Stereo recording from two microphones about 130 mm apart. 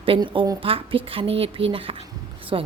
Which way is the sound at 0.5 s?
45° right (ahead or behind).